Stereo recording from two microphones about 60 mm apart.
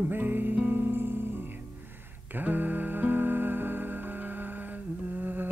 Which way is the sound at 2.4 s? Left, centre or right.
Right.